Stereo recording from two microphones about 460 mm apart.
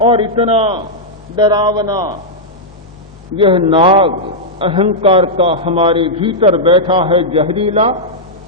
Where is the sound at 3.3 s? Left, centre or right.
Centre.